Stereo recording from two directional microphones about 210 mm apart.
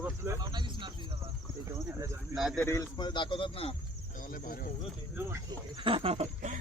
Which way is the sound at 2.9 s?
20° left (ahead or behind).